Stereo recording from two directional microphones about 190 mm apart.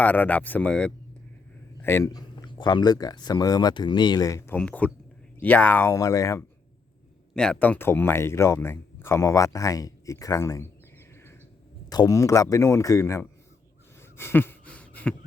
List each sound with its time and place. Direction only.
0.0 s speech: 10° left (ahead or behind)
7.3 s speech: 5° left (ahead or behind)
11.9 s speech: 20° left (ahead or behind)
14.2 s a sound: 10° left (ahead or behind)